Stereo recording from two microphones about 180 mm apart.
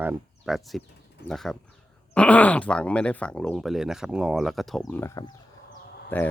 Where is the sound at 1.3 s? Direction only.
Centre (ahead or behind).